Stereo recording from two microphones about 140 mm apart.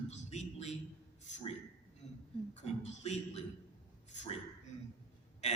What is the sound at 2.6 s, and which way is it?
Speech, 55° left (ahead or behind).